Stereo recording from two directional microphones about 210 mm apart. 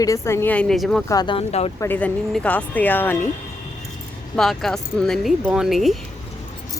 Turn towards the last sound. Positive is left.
turn(degrees=0)  # may be behind; listen again after turning